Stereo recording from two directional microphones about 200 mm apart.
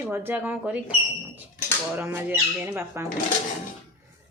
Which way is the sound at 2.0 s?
10° right (ahead or behind).